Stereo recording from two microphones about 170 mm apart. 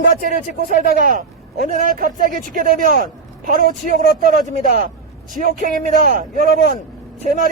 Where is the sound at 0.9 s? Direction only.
55° right (ahead or behind).